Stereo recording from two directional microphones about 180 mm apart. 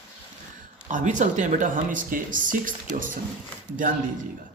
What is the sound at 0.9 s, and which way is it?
Speech, 45° right (ahead or behind).